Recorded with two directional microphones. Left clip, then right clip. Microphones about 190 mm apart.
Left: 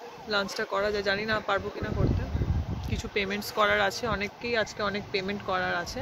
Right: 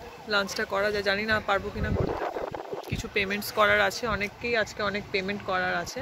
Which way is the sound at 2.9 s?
15° right (ahead or behind).